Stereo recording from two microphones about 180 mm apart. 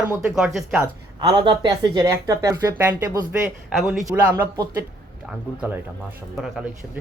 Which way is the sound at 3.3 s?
5° right (ahead or behind).